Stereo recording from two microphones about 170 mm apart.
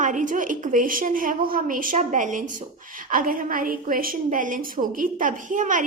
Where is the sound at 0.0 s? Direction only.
50° right (ahead or behind).